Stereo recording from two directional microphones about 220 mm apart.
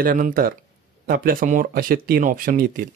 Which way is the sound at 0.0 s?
40° right (ahead or behind).